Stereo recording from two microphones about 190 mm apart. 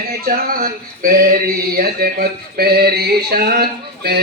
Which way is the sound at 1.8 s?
55° right (ahead or behind).